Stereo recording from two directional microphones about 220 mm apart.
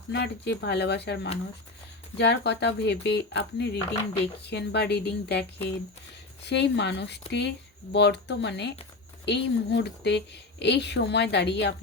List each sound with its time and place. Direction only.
0.1 s a woman's voice: 50° left (ahead or behind)